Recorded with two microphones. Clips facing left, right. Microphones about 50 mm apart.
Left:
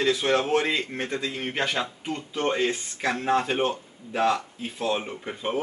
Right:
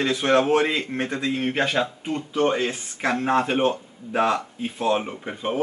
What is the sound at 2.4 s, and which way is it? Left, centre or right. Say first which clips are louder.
Speech: right 2 dB; centre.